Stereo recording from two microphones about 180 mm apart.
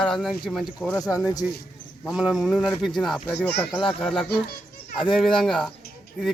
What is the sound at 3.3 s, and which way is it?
Speech, 70° left (ahead or behind).